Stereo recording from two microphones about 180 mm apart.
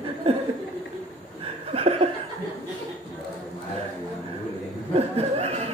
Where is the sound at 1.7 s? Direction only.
35° right (ahead or behind).